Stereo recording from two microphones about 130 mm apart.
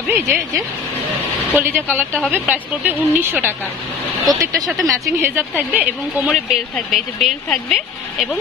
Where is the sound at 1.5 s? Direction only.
15° right (ahead or behind).